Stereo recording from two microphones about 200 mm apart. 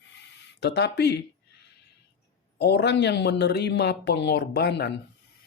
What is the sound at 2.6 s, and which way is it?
Speech, 55° left (ahead or behind).